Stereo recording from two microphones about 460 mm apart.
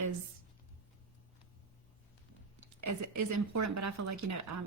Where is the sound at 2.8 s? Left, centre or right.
Right.